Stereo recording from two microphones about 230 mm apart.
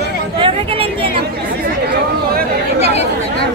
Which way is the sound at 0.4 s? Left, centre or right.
Right.